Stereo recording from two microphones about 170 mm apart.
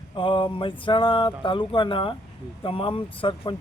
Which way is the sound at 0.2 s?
30° left (ahead or behind).